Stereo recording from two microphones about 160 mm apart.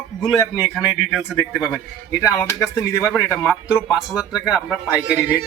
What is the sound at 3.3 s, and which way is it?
Speech, 10° right (ahead or behind).